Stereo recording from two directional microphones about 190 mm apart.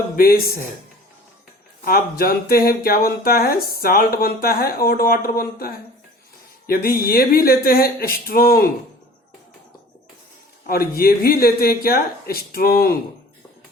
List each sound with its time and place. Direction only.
0.2 s speech: 50° left (ahead or behind)
1.8 s speech: 50° left (ahead or behind)
10.7 s speech: 50° left (ahead or behind)